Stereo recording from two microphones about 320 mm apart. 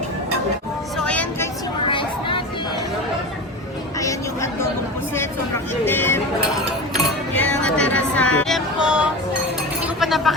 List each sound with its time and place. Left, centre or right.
0.9 s vehicle: centre
1.9 s a sound: centre
5.8 s vehicle: centre
6.9 s music: centre
9.8 s chink: centre